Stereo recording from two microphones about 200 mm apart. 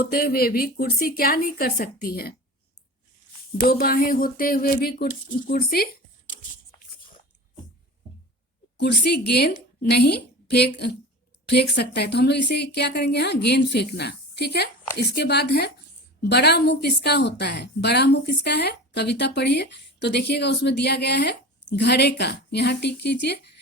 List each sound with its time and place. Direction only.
0.0 s a woman's voice: 50° left (ahead or behind)
3.6 s a woman's voice: 50° left (ahead or behind)
8.8 s a woman's voice: 55° left (ahead or behind)